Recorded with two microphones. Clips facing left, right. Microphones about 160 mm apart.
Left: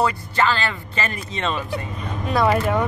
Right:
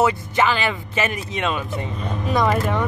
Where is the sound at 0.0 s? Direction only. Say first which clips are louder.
Right 2 dB; 20° right (ahead or behind).